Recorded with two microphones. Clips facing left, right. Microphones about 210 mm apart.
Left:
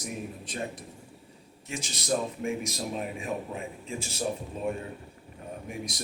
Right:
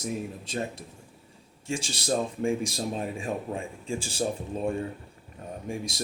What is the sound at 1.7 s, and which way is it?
Speech, 30° right (ahead or behind).